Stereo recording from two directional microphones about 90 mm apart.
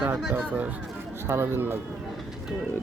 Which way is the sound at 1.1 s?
25° right (ahead or behind).